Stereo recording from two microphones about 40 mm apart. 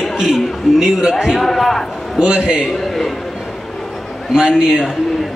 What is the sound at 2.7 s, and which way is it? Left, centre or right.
Speech, centre.